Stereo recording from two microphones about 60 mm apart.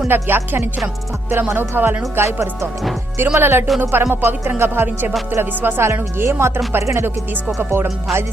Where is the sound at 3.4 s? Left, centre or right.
Right.